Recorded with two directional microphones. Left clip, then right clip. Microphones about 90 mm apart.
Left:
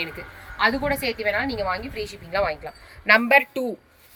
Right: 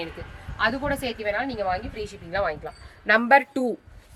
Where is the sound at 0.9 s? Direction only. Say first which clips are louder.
Left 3 dB; 15° right (ahead or behind).